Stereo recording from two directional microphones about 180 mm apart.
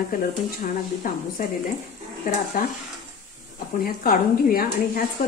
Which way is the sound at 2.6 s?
55° left (ahead or behind).